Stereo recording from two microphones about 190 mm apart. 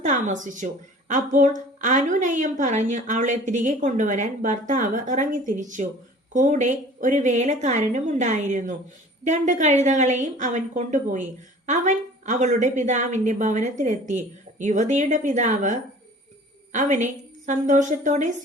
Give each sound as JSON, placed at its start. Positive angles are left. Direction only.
{"t": 0.0, "sound": "a woman's voice", "side_deg": -40}